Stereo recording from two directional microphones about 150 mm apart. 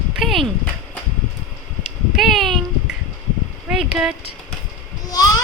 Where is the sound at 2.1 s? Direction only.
Centre (ahead or behind).